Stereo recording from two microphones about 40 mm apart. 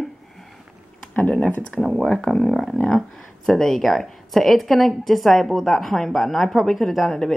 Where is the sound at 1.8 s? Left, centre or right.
Left.